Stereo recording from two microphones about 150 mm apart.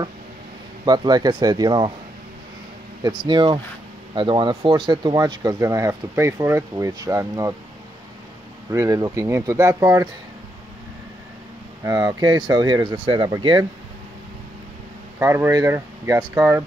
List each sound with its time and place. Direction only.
0.8 s speech: 25° right (ahead or behind)
3.0 s speech: 30° right (ahead or behind)
8.7 s speech: 20° right (ahead or behind)
11.8 s speech: 25° right (ahead or behind)
15.1 s speech: 15° right (ahead or behind)